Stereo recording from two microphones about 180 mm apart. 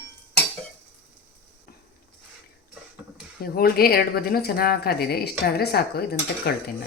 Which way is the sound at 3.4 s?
55° left (ahead or behind).